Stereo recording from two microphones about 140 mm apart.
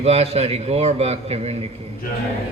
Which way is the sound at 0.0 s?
45° right (ahead or behind).